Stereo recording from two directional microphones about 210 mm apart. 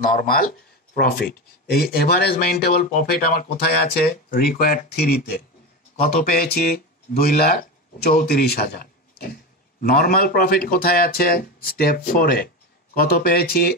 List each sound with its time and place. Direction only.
0.9 s speech: 45° left (ahead or behind)